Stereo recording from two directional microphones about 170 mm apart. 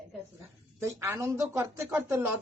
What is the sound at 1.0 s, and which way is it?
A woman's voice, 15° right (ahead or behind).